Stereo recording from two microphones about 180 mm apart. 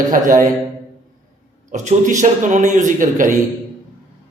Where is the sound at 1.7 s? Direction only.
40° right (ahead or behind).